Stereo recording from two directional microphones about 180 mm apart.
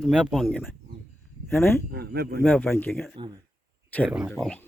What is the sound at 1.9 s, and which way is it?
Speech, 60° right (ahead or behind).